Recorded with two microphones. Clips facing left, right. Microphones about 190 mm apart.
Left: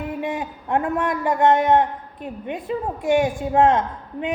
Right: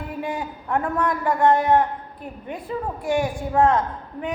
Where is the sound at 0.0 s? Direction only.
20° left (ahead or behind).